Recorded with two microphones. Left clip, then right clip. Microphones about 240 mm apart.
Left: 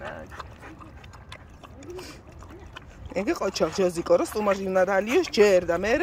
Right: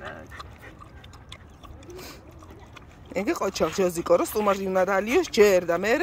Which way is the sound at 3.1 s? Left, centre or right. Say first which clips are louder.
Even; centre.